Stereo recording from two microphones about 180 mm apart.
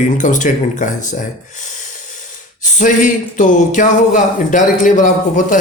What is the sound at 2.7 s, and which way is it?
Speech, 45° left (ahead or behind).